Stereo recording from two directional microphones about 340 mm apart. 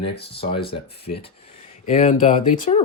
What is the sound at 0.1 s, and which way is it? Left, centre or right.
Speech, left.